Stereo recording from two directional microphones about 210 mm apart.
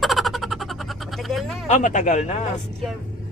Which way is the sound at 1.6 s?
35° left (ahead or behind).